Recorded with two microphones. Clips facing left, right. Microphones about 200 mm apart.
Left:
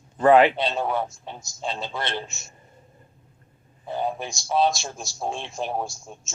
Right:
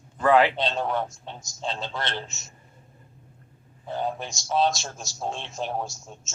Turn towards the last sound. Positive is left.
turn(degrees=10)  # may be behind; listen again after turning